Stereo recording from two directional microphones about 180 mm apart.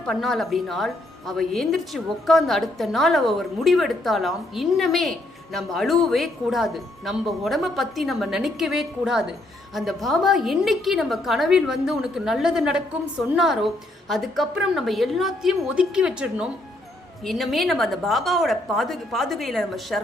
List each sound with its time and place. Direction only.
0.0 s a woman's voice: centre (ahead or behind)